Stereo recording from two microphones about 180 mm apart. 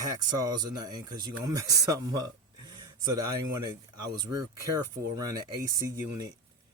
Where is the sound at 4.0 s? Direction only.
20° right (ahead or behind).